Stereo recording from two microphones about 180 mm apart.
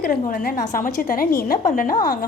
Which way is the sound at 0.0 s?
55° left (ahead or behind).